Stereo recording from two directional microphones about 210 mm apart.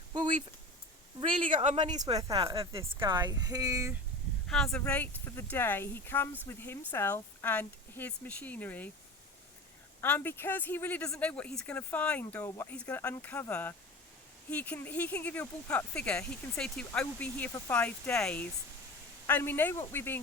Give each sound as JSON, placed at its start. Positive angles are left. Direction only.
{"t": 0.1, "sound": "a sound", "side_deg": -20}
{"t": 1.2, "sound": "speech", "side_deg": -25}
{"t": 4.4, "sound": "speech", "side_deg": 5}
{"t": 10.0, "sound": "speech", "side_deg": 10}